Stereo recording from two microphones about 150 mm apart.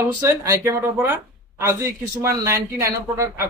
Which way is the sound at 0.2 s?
20° right (ahead or behind).